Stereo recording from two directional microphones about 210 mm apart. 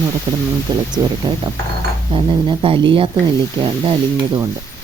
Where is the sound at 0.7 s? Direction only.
20° right (ahead or behind).